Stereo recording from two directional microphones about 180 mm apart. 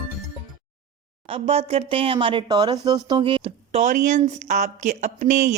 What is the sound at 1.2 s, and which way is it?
Speech, 30° right (ahead or behind).